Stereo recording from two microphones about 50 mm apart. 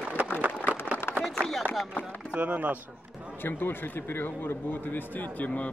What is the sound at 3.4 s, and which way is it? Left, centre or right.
Speech, left.